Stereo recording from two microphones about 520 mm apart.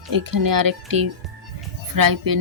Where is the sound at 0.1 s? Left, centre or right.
Right.